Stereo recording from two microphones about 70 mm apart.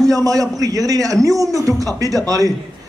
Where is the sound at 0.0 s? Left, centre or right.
Right.